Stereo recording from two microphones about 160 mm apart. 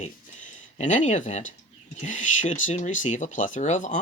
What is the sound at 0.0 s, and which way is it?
Speech, 50° left (ahead or behind).